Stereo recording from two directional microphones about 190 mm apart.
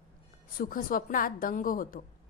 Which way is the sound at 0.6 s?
45° left (ahead or behind).